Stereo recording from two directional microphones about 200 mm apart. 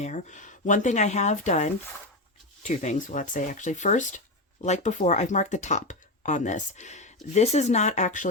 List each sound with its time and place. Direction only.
0.0 s speech: 35° left (ahead or behind)